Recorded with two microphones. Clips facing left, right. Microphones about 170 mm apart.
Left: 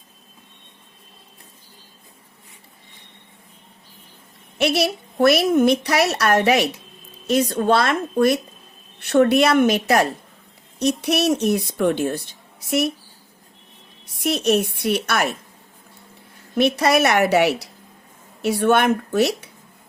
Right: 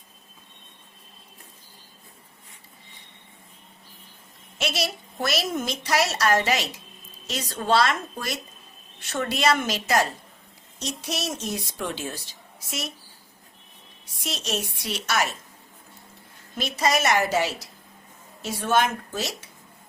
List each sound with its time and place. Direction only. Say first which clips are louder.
4.5 s a woman's voice: left 9 dB; 60° left (ahead or behind)
14.0 s a woman's voice: left 13 dB; 60° left (ahead or behind)
16.6 s a woman's voice: left 8 dB; 65° left (ahead or behind)